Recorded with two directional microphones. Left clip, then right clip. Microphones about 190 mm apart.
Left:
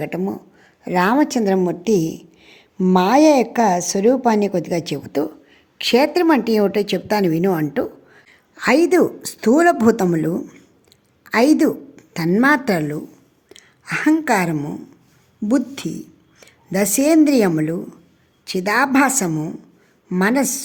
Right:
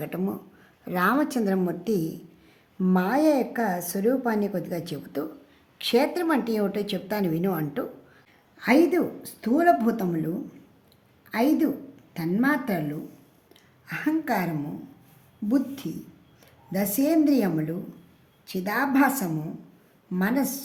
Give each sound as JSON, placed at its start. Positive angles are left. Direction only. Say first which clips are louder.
{"t": 0.3, "sound": "a woman's voice", "louder": "left 6 dB", "side_deg": 25}
{"t": 8.3, "sound": "a woman's voice", "louder": "left 6 dB", "side_deg": 50}